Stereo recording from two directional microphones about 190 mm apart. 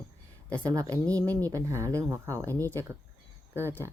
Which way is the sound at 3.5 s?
10° right (ahead or behind).